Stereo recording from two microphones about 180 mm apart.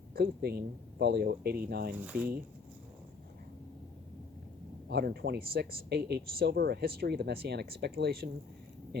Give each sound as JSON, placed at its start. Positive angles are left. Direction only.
{"t": 0.1, "sound": "speech", "side_deg": -60}
{"t": 2.0, "sound": "speech", "side_deg": -10}
{"t": 4.9, "sound": "speech", "side_deg": -60}